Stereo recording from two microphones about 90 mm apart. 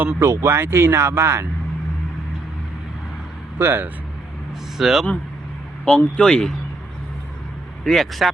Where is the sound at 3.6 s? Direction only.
25° right (ahead or behind).